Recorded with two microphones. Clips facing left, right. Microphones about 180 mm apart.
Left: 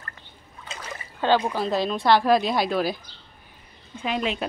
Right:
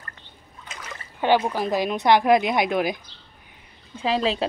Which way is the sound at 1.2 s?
15° right (ahead or behind).